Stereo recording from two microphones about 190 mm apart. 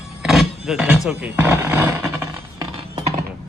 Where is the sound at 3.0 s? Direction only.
35° right (ahead or behind).